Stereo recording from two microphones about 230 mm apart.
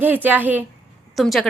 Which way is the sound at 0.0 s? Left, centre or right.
Centre.